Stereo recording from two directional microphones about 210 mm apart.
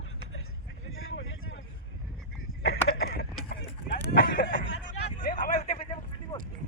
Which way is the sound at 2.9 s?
45° left (ahead or behind).